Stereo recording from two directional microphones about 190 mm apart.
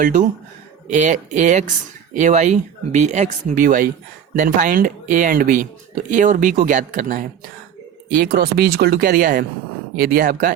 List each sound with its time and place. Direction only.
0.0 s speech: 45° right (ahead or behind)